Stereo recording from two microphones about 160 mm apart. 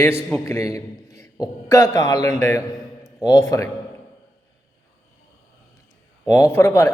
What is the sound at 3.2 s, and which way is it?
Mantra, 25° left (ahead or behind).